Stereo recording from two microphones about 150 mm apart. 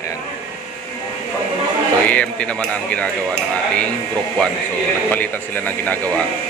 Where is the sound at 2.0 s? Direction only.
10° left (ahead or behind).